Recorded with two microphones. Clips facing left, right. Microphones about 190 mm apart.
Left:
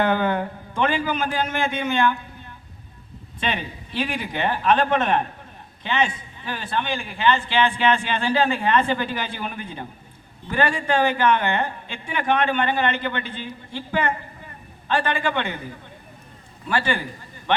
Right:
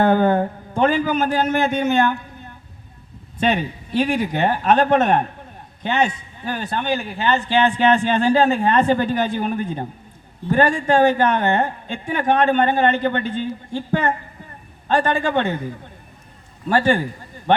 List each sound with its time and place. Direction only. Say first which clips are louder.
0.0 s a man's voice: right 5 dB; 40° right (ahead or behind)
3.4 s a man's voice: right 8 dB; 45° right (ahead or behind)
16.6 s a man's voice: right 7 dB; 45° right (ahead or behind)